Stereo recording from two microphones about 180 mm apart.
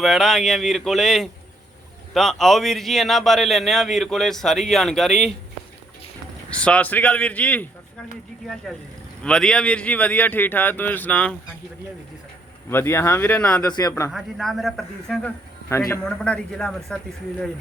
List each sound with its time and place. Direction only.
0.0 s a man's voice: centre (ahead or behind)
6.5 s a man's voice: 5° left (ahead or behind)
9.2 s a man's voice: 5° left (ahead or behind)
12.7 s a man's voice: 15° left (ahead or behind)
13.7 s a man's voice: 20° left (ahead or behind)
14.1 s a man's voice: centre (ahead or behind)
15.7 s a man's voice: 15° left (ahead or behind)